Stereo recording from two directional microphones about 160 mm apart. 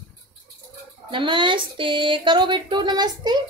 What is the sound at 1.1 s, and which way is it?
Speech, 30° right (ahead or behind).